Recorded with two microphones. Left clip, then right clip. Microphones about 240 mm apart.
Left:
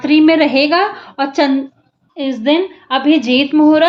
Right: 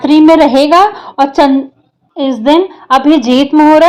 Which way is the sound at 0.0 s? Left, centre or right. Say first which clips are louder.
Right 5 dB; right.